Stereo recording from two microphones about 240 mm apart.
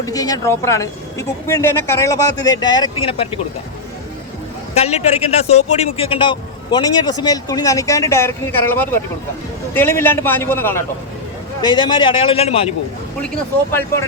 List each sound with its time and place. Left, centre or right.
0.0 s a woman's voice: centre
4.7 s a man's voice: left